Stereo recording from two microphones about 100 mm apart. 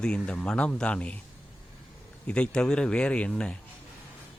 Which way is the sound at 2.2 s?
10° left (ahead or behind).